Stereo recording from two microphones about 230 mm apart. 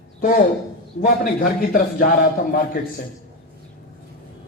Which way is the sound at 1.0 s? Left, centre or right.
Left.